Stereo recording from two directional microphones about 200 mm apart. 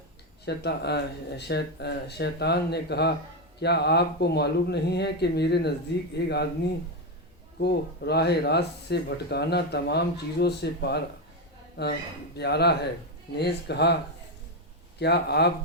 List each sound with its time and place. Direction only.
0.4 s speech: 55° left (ahead or behind)
7.6 s speech: 55° left (ahead or behind)
12.4 s speech: 55° left (ahead or behind)
14.9 s speech: 55° left (ahead or behind)